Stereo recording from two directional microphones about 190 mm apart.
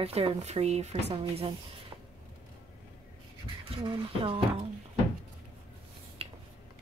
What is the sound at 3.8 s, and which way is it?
Speech, 30° right (ahead or behind).